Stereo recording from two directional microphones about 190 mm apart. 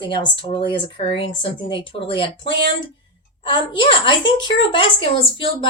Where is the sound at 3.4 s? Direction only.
25° left (ahead or behind).